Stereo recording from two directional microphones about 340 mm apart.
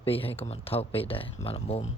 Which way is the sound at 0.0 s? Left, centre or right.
Centre.